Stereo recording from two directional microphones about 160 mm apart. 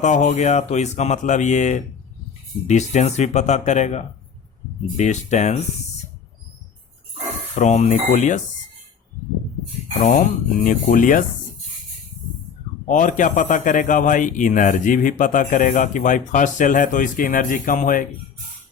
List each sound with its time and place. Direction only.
0.0 s a man's voice: 50° left (ahead or behind)
7.5 s a man's voice: 45° left (ahead or behind)
10.6 s speech: 55° left (ahead or behind)
12.9 s a man's voice: 55° left (ahead or behind)